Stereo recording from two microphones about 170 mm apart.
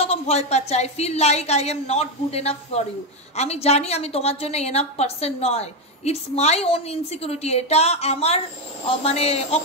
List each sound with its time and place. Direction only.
0.0 s a woman's voice: 35° left (ahead or behind)